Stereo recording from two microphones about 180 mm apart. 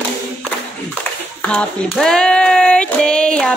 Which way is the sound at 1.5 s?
5° left (ahead or behind).